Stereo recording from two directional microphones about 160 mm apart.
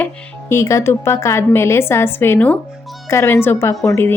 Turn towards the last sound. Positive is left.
turn(degrees=15)  # may be behind; listen again after turning